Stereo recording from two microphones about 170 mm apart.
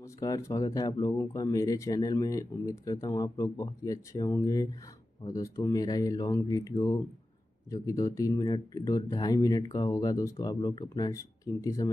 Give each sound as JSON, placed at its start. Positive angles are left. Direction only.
{"t": 0.0, "sound": "speech", "side_deg": 20}